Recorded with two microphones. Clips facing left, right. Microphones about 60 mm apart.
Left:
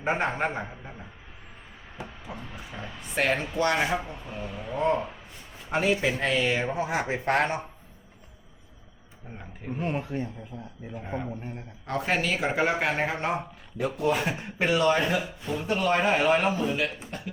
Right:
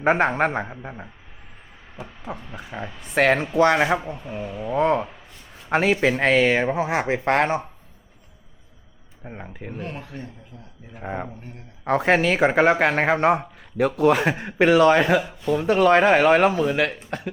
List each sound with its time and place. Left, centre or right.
0.0 s a man's voice: right
0.7 s a man's voice: right
2.7 s speech: right
4.3 s speech: centre
4.7 s speech: right
6.9 s speech: right
9.2 s speech: right
9.8 s speech: left
10.9 s speech: right